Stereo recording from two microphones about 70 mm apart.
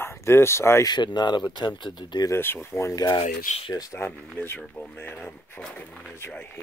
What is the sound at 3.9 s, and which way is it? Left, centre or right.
Speech, left.